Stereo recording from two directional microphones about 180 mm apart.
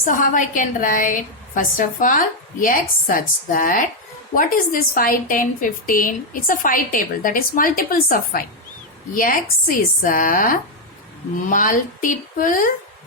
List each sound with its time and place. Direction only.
0.0 s a woman's voice: 45° left (ahead or behind)